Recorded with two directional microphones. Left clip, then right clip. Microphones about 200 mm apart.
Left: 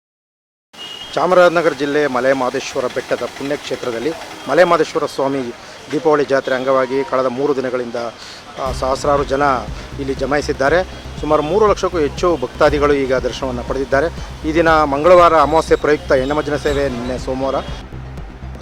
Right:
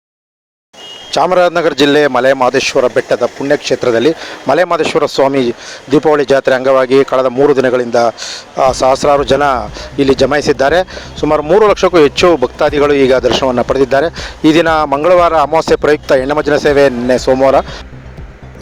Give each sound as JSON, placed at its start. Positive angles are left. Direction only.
{"t": 1.1, "sound": "a man's voice", "side_deg": -40}